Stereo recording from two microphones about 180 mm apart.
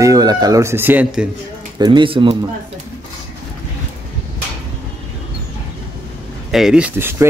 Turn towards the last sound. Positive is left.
turn(degrees=-10)  # may be behind; listen again after turning